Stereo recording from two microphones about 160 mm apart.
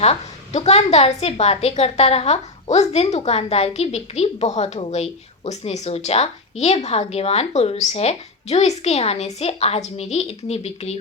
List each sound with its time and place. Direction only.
0.0 s a woman's voice: 40° left (ahead or behind)